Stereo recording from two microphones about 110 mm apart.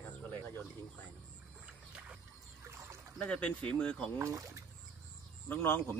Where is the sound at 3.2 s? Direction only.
10° left (ahead or behind).